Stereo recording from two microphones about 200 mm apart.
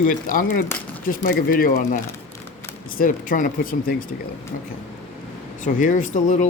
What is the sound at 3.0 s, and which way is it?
Speech, 40° left (ahead or behind).